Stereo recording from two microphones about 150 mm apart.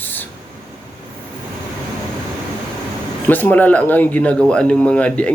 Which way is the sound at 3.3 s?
10° left (ahead or behind).